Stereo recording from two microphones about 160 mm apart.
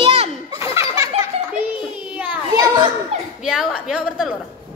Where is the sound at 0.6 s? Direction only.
15° right (ahead or behind).